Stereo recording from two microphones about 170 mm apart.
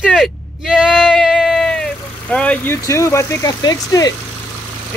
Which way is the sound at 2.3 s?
10° left (ahead or behind).